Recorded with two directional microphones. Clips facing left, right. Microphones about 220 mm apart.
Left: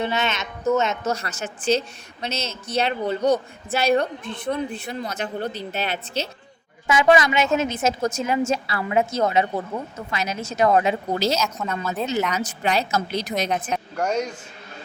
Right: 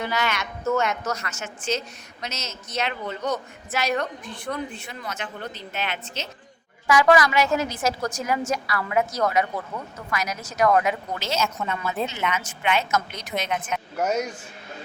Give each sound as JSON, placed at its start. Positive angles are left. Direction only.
{"t": 0.0, "sound": "a woman's voice", "side_deg": 25}
{"t": 4.7, "sound": "a woman's voice", "side_deg": 35}
{"t": 6.8, "sound": "a woman's voice", "side_deg": 20}
{"t": 11.3, "sound": "a woman's voice", "side_deg": 0}
{"t": 12.3, "sound": "a woman's voice", "side_deg": 35}
{"t": 13.9, "sound": "speech", "side_deg": -5}